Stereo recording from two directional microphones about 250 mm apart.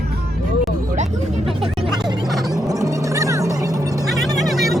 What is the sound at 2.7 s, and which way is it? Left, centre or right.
Music, centre.